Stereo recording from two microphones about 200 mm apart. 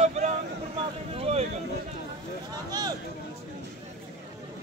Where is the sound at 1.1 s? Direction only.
30° right (ahead or behind).